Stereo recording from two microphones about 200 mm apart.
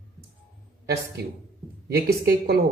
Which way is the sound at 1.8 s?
50° right (ahead or behind).